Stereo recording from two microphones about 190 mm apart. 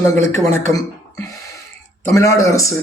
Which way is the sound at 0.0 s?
15° left (ahead or behind).